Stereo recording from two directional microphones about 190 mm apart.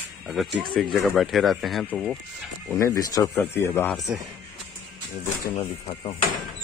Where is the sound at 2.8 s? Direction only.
15° left (ahead or behind).